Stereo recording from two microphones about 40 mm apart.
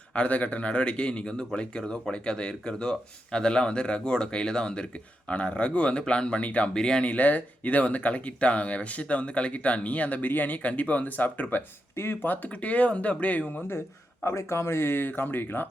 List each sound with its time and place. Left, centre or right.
0.1 s speech: left
6.7 s speech: centre
7.0 s speech: left
10.2 s speech: left
10.6 s speech: left
11.9 s speech: left
12.3 s speech: left
14.3 s speech: left